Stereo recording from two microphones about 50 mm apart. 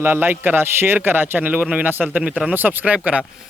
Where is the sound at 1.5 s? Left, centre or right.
Right.